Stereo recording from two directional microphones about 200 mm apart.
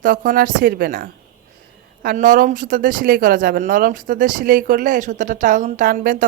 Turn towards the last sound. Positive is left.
turn(degrees=-45)  # may be behind; listen again after turning